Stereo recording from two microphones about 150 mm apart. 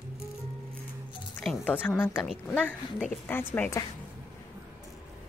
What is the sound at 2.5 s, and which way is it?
Speech, 10° left (ahead or behind).